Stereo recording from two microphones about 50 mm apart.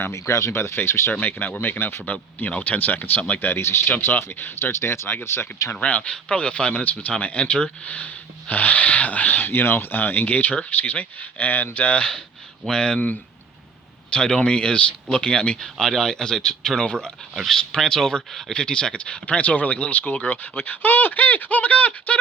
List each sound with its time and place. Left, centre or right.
0.1 s speech: left
1.2 s speech: left
2.0 s speech: left
3.4 s speech: left
4.7 s speech: left
5.7 s speech: left
6.8 s speech: left
12.6 s speech: centre
14.1 s speech: centre